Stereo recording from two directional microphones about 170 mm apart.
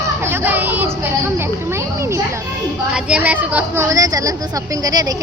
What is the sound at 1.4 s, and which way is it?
Children playing, 15° right (ahead or behind).